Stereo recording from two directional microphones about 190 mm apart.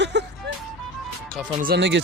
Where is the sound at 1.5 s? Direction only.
55° right (ahead or behind).